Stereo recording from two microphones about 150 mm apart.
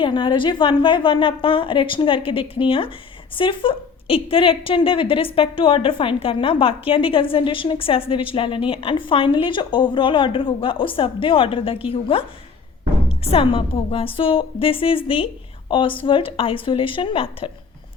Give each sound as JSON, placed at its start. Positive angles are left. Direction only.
{"t": 0.0, "sound": "a woman's voice", "side_deg": 35}
{"t": 13.2, "sound": "a woman's voice", "side_deg": 40}